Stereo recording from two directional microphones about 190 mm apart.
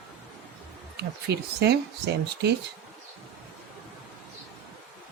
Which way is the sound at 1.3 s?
60° right (ahead or behind).